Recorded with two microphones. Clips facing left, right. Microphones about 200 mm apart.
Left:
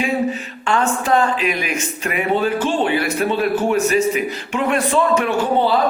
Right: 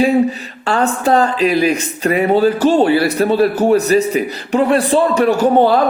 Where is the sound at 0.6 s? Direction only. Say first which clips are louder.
Right 4 dB; 35° right (ahead or behind).